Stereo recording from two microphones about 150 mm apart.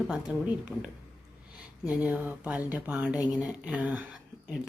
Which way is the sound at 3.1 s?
25° left (ahead or behind).